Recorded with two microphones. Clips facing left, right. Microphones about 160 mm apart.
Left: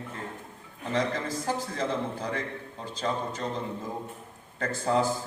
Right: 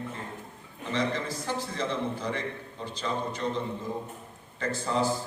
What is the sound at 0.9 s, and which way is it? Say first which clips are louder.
A man's voice: left 1 dB; 45° left (ahead or behind).